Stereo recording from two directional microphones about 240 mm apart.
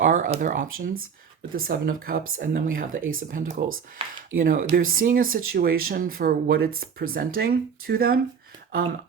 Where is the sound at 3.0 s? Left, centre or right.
Right.